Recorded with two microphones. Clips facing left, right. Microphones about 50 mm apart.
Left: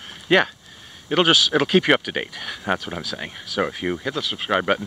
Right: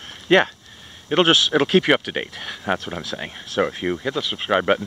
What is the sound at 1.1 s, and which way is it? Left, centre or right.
Speech, centre.